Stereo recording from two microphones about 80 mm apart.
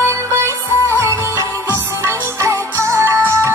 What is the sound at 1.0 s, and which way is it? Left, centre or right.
Music, right.